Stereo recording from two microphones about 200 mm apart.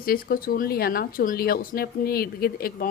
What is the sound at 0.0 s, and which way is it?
Speech, 45° left (ahead or behind).